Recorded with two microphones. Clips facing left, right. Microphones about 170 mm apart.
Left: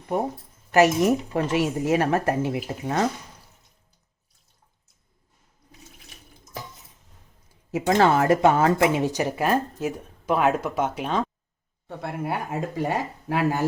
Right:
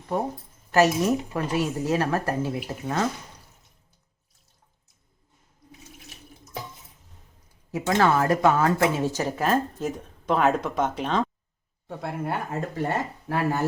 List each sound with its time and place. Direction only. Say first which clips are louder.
0.7 s speech: left 2 dB; 15° left (ahead or behind)
7.7 s speech: left 2 dB; 20° left (ahead or behind)